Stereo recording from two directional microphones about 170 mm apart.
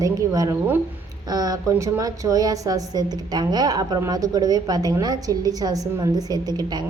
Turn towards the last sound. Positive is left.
turn(degrees=-25)  # may be behind; listen again after turning